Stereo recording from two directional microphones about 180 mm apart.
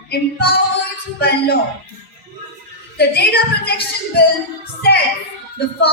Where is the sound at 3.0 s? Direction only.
65° left (ahead or behind).